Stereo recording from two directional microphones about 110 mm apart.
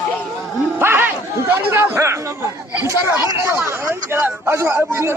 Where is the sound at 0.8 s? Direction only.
20° right (ahead or behind).